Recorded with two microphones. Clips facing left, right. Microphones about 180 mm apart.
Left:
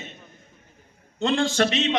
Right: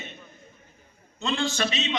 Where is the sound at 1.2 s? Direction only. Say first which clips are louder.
Left 6 dB; 70° left (ahead or behind).